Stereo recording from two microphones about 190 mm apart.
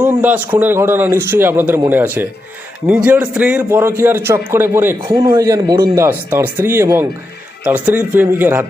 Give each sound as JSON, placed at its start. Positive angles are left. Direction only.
{"t": 0.0, "sound": "a man's voice", "side_deg": -10}